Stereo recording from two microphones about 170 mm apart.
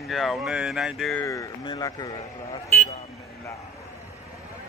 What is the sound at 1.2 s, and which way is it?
Speech, 20° left (ahead or behind).